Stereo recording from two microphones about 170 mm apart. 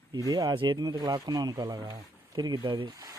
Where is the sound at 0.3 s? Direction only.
20° right (ahead or behind).